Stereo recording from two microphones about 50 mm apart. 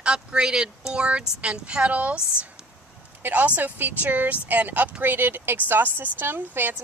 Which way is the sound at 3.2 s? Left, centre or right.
Right.